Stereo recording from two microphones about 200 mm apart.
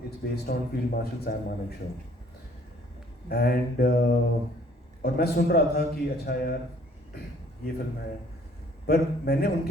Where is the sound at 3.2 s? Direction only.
50° left (ahead or behind).